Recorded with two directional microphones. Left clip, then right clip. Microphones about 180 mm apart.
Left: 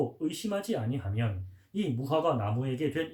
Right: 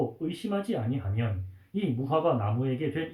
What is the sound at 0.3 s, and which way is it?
Speech, 65° left (ahead or behind).